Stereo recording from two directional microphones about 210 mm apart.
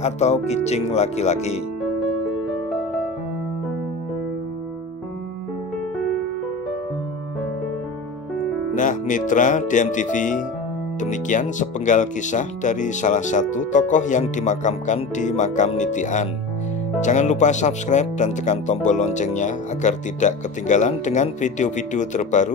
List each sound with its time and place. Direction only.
0.0 s speech: 30° left (ahead or behind)
8.7 s speech: 40° left (ahead or behind)